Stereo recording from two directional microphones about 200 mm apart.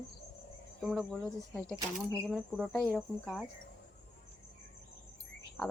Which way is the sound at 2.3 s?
Centre (ahead or behind).